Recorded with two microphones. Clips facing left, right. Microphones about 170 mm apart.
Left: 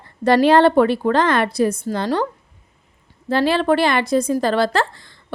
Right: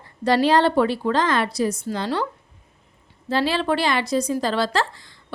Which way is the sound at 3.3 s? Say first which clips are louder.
Left 5 dB; 55° left (ahead or behind).